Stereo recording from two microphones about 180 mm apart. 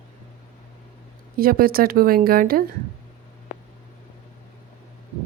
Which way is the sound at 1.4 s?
55° right (ahead or behind).